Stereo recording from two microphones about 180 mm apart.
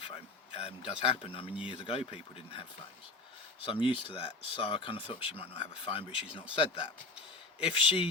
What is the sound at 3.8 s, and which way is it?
Speech, 30° left (ahead or behind).